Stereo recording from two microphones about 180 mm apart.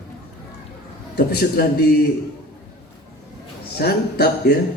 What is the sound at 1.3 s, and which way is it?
Speech, 60° left (ahead or behind).